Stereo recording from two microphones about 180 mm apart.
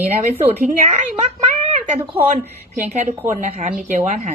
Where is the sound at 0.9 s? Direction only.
35° right (ahead or behind).